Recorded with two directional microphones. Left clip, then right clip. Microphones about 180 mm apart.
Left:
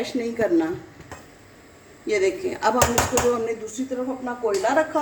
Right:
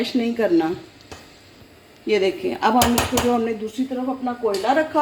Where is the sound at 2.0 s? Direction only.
50° right (ahead or behind).